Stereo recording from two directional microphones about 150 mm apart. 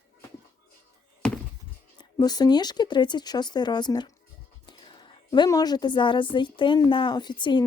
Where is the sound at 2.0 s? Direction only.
25° left (ahead or behind).